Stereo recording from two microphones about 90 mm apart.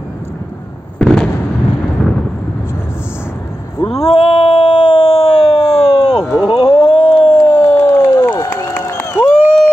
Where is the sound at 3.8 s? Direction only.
90° left.